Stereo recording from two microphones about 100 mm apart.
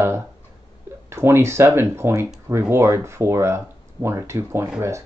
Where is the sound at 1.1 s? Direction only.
25° right (ahead or behind).